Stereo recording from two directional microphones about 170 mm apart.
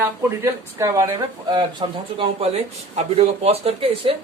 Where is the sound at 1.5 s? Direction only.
30° right (ahead or behind).